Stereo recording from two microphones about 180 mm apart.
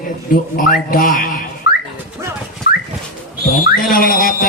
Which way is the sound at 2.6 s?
55° left (ahead or behind).